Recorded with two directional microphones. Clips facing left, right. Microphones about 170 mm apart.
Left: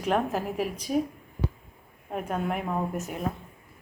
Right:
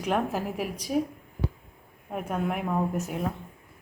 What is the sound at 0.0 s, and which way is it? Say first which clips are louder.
Speech: left 1 dB; 10° right (ahead or behind).